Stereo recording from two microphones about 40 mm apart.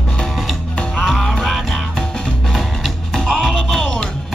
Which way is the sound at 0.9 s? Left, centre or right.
Centre.